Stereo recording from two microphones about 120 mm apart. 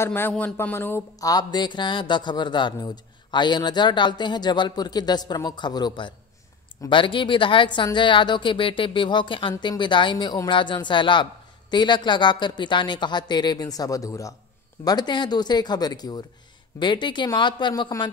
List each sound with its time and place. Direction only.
0.0 s speech: 20° left (ahead or behind)
0.3 s speech: 5° left (ahead or behind)
0.6 s speech: 20° left (ahead or behind); by 18.1 s 35° left (ahead or behind)